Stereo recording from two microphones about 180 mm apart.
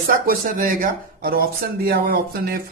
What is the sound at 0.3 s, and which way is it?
A man's voice, 50° right (ahead or behind).